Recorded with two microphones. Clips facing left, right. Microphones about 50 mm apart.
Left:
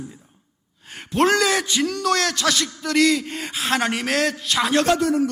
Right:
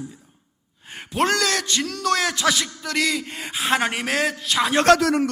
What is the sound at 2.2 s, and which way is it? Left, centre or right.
A man's voice, centre.